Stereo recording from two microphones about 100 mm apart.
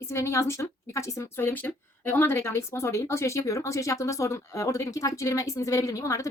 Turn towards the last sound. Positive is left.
turn(degrees=35)  # may be behind; listen again after turning